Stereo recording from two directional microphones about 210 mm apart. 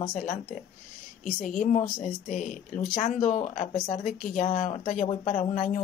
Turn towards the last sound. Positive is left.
turn(degrees=35)  # may be behind; listen again after turning